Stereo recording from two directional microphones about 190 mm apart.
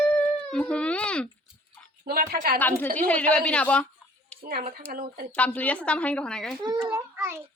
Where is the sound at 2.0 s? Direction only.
55° right (ahead or behind).